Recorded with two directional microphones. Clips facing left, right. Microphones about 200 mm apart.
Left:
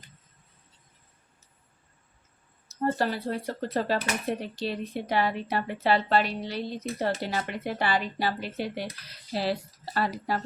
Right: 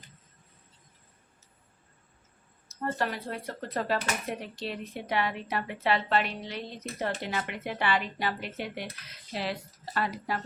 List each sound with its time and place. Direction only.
2.6 s speech: 30° left (ahead or behind)